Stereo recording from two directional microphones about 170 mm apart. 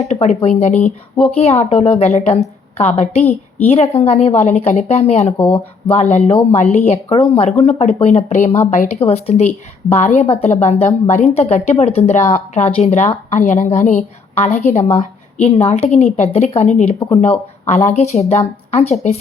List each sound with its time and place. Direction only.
0.0 s speech: 40° left (ahead or behind)